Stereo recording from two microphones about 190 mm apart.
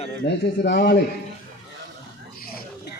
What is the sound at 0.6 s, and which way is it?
Speech, 65° left (ahead or behind).